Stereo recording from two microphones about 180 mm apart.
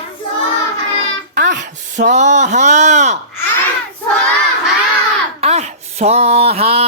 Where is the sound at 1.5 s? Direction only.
45° right (ahead or behind).